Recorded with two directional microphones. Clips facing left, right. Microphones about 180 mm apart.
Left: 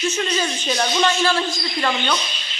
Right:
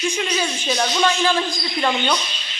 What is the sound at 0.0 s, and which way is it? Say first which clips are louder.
Speech: left 1 dB; 10° right (ahead or behind).